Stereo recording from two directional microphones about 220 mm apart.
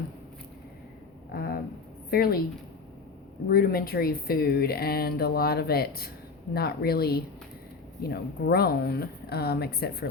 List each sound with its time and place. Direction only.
1.3 s a sound: 45° left (ahead or behind)
2.0 s speech: 45° left (ahead or behind)
3.5 s speech: 40° left (ahead or behind)